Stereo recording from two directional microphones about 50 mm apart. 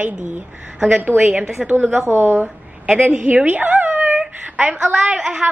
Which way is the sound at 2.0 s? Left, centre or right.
Right.